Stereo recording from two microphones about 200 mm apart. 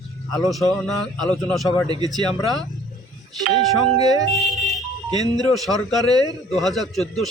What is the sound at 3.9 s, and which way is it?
Speech, 20° right (ahead or behind).